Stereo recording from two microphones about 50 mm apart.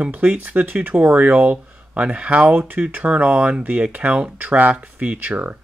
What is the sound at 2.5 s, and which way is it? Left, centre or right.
Speech, right.